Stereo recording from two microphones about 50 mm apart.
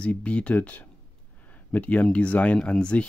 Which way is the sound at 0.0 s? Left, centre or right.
Left.